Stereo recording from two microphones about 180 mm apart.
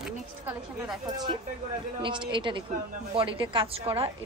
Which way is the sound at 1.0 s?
25° right (ahead or behind).